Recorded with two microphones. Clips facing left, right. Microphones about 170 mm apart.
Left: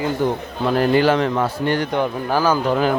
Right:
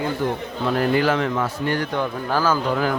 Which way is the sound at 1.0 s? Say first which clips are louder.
Left 4 dB; 30° left (ahead or behind).